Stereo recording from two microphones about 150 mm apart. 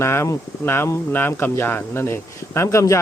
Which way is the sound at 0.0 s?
15° left (ahead or behind).